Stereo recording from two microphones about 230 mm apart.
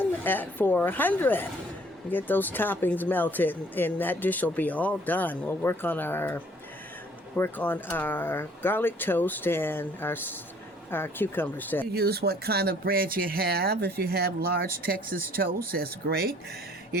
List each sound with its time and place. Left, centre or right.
0.0 s speech: centre
11.9 s speech: right